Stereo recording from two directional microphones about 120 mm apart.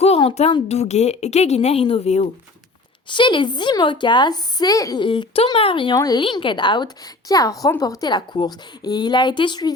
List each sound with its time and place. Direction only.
0.3 s a woman's voice: 60° left (ahead or behind)
3.1 s a woman's voice: 40° left (ahead or behind)
5.0 s a child's voice: 50° left (ahead or behind)
6.0 s a woman's voice: 35° left (ahead or behind)